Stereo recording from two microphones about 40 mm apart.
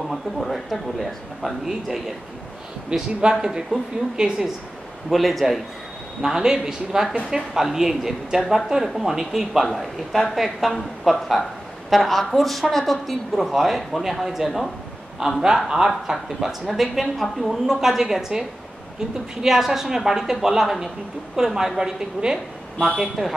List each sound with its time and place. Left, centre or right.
0.1 s a woman's voice: centre
2.9 s a man's voice: right
3.3 s a woman's voice: centre
5.1 s speech: centre
6.2 s a woman's voice: centre
9.7 s a woman's voice: centre
19.4 s a woman's voice: centre
22.9 s a woman's voice: centre